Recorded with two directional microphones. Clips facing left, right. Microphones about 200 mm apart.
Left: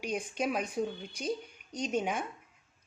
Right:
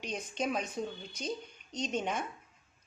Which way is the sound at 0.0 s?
10° left (ahead or behind).